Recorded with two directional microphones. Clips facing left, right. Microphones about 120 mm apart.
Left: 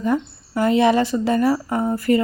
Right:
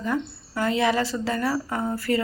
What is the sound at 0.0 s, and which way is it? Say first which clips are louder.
A woman's voice: left 6 dB; 20° left (ahead or behind).